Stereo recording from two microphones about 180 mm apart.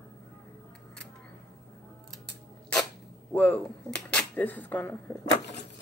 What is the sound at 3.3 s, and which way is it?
Speech, 10° left (ahead or behind).